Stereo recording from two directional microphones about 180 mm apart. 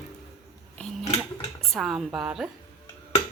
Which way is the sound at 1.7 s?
Centre (ahead or behind).